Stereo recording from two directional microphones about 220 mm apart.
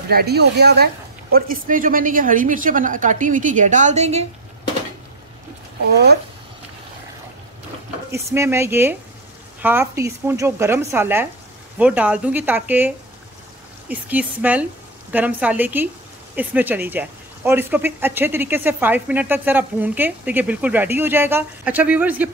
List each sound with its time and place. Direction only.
0.1 s a woman's voice: 45° right (ahead or behind); by 4.3 s 30° right (ahead or behind)
8.1 s speech: 15° right (ahead or behind)